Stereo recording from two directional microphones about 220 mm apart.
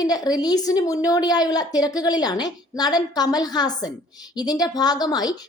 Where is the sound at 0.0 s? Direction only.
15° left (ahead or behind).